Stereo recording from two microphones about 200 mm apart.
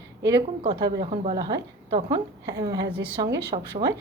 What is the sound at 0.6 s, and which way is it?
A woman's voice, 25° right (ahead or behind).